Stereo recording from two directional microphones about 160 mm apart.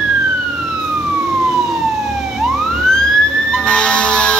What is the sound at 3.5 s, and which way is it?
Music, 5° left (ahead or behind).